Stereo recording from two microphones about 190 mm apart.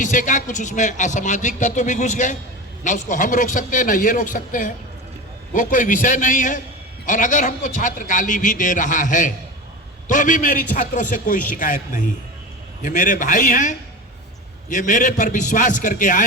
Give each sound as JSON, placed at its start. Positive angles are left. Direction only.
{"t": 0.0, "sound": "a man's voice", "side_deg": 40}